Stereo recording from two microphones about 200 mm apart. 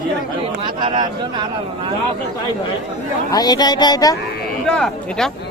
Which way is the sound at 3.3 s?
20° left (ahead or behind).